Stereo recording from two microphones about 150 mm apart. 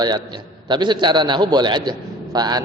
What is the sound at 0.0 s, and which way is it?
A man's voice, 30° right (ahead or behind).